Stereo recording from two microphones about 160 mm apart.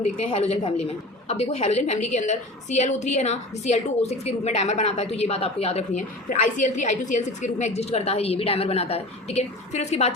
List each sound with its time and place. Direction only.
0.3 s a woman's voice: 40° left (ahead or behind)